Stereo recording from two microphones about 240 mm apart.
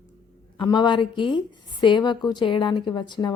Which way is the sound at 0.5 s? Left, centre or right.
Centre.